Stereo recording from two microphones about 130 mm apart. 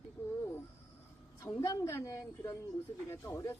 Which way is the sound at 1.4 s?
25° left (ahead or behind).